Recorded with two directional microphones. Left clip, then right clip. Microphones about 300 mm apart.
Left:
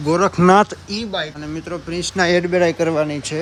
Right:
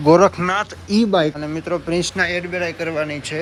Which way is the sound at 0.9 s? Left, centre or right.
Centre.